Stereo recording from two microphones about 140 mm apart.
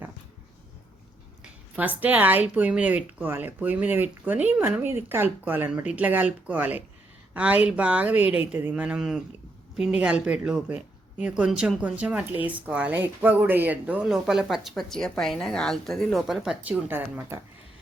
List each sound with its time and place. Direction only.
1.7 s speech: 10° right (ahead or behind)
16.9 s speech: 15° right (ahead or behind)